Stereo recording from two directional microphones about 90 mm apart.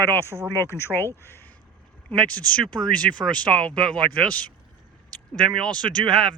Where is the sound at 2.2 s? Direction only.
15° left (ahead or behind).